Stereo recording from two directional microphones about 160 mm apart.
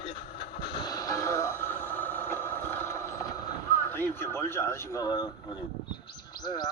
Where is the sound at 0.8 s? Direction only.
25° left (ahead or behind).